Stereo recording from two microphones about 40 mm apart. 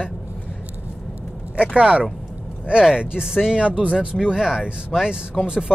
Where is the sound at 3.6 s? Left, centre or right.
Right.